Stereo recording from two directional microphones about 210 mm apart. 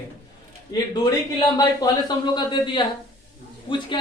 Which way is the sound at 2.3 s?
20° left (ahead or behind).